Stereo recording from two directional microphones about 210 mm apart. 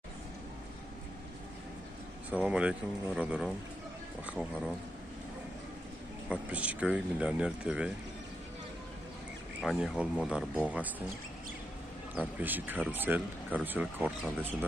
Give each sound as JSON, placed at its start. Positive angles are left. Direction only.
{"t": 2.3, "sound": "speech", "side_deg": -5}
{"t": 6.2, "sound": "speech", "side_deg": -5}
{"t": 9.6, "sound": "speech", "side_deg": -5}
{"t": 12.2, "sound": "speech", "side_deg": -10}